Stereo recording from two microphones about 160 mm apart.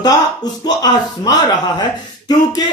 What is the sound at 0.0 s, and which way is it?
Speech, 25° left (ahead or behind).